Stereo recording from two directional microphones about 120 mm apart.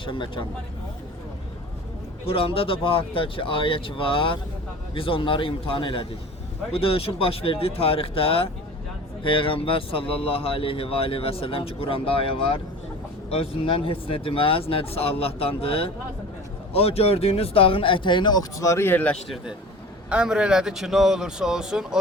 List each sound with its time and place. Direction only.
0.0 s speech: 45° left (ahead or behind)
2.2 s speech: 50° left (ahead or behind); by 19.1 s 15° left (ahead or behind)
20.1 s a man's voice: 10° right (ahead or behind)